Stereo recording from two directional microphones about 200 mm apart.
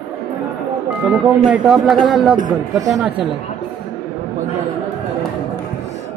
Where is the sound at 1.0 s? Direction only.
5° right (ahead or behind).